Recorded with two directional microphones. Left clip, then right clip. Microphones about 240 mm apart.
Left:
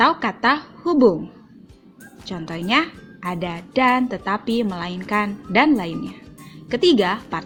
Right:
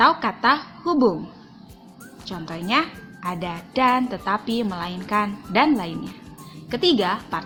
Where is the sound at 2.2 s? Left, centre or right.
Centre.